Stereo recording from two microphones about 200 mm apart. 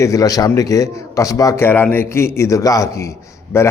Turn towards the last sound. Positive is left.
turn(degrees=15)  # may be behind; listen again after turning